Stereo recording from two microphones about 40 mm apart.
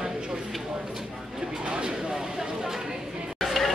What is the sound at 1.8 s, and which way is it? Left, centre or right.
Speech, right.